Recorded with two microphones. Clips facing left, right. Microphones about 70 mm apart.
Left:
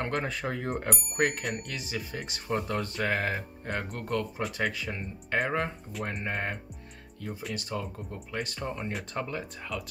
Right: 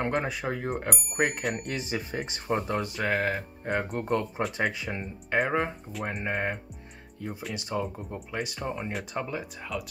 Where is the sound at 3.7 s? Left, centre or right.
Centre.